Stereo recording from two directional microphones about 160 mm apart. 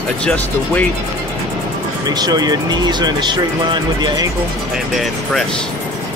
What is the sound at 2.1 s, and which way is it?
Speech, 25° right (ahead or behind).